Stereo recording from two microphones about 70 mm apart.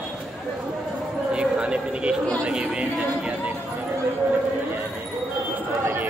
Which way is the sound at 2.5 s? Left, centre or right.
Centre.